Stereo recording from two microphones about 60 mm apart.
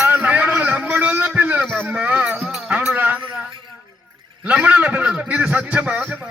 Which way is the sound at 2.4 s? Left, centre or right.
Centre.